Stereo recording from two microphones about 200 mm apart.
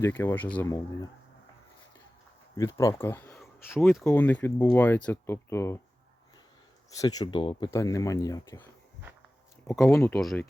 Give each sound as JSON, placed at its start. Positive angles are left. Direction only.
{"t": 0.0, "sound": "speech", "side_deg": 10}
{"t": 2.6, "sound": "speech", "side_deg": 15}
{"t": 6.9, "sound": "speech", "side_deg": 15}
{"t": 9.9, "sound": "speech", "side_deg": 15}
{"t": 10.2, "sound": "speech", "side_deg": 0}